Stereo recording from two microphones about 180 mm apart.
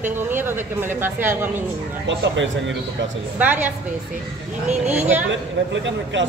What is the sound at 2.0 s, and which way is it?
Speech, 90° right.